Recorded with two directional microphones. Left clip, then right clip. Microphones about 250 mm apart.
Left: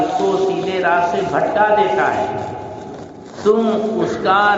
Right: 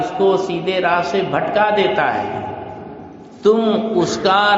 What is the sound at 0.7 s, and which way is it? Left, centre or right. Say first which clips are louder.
Speech: right 1 dB; right.